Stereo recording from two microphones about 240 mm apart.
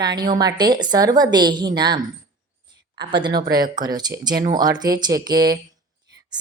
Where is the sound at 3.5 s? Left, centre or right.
Right.